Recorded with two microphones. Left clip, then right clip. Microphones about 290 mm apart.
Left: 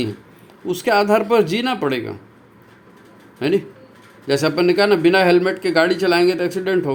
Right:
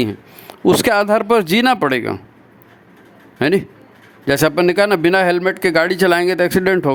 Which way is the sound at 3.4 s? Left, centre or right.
Right.